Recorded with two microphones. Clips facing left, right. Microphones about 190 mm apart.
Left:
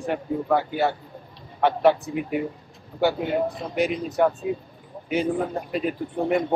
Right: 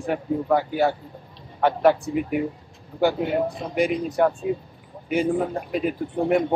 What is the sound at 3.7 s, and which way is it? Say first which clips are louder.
Speech: right 1 dB; 10° right (ahead or behind).